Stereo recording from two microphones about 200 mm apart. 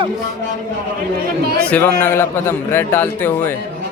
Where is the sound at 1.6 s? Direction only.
5° left (ahead or behind).